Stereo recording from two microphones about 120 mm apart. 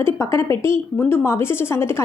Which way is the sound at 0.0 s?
20° left (ahead or behind).